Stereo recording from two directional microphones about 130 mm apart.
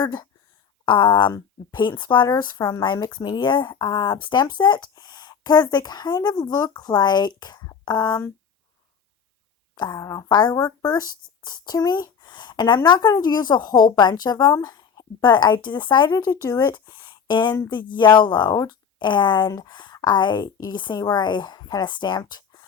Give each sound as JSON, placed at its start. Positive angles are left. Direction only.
{"t": 0.0, "sound": "speech", "side_deg": 30}
{"t": 9.7, "sound": "speech", "side_deg": 30}